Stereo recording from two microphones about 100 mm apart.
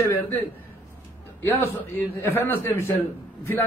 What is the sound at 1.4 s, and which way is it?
A man's voice, 25° left (ahead or behind).